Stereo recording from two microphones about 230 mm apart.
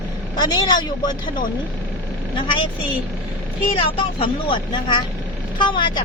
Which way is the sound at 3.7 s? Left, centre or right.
Left.